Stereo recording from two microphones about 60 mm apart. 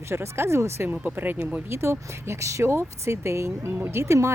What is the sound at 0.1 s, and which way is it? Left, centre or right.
Speech, right.